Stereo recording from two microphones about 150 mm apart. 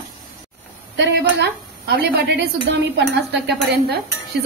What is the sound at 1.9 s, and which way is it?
Speech, 90° right.